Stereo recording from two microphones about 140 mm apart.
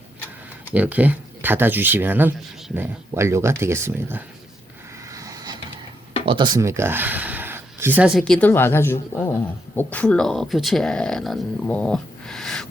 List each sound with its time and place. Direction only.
0.7 s speech: 10° right (ahead or behind)
5.0 s vehicle: 25° right (ahead or behind)
6.2 s speech: 35° right (ahead or behind)
6.6 s a sound: 20° right (ahead or behind)
8.2 s speech: 10° left (ahead or behind)
11.7 s a sound: 10° left (ahead or behind)